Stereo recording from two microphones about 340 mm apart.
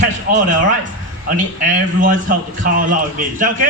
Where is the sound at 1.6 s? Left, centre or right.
Right.